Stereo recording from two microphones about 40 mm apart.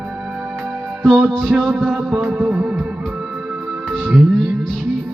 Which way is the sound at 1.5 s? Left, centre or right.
Right.